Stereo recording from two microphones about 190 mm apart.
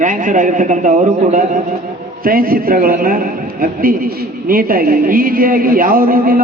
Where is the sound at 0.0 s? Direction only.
45° right (ahead or behind).